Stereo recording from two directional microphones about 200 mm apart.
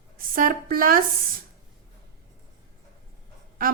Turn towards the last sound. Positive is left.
turn(degrees=-45)  # may be behind; listen again after turning